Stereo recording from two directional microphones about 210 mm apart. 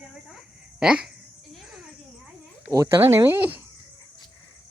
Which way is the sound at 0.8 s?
5° right (ahead or behind).